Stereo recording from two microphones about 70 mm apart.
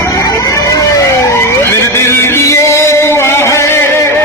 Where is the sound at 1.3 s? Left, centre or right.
Left.